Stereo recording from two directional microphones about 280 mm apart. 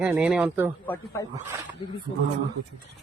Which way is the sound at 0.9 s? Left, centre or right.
Centre.